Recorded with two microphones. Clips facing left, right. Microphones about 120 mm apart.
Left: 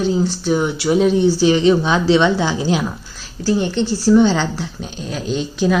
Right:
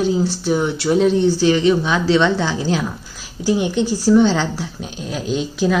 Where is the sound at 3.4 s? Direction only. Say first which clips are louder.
Even; 15° right (ahead or behind).